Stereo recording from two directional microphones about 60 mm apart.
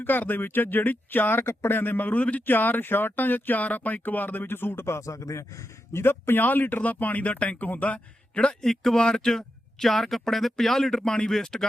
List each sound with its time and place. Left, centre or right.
0.0 s speech: left; by 8.5 s centre
8.6 s speech: centre